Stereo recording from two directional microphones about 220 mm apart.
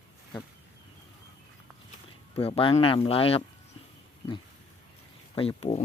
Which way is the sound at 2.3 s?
25° left (ahead or behind).